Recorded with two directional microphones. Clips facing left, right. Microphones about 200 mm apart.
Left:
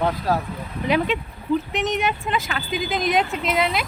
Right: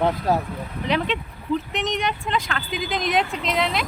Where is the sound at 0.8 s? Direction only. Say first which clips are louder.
Left 3 dB; 5° left (ahead or behind).